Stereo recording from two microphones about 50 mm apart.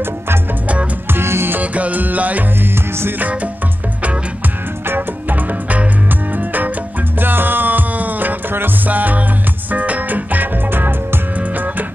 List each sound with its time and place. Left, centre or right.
1.1 s music: right
1.6 s music: right
2.6 s music: right
4.8 s music: right
11.3 s music: right